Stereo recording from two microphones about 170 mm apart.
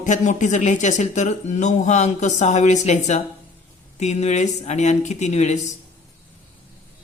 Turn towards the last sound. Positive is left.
turn(degrees=40)  # may be behind; listen again after turning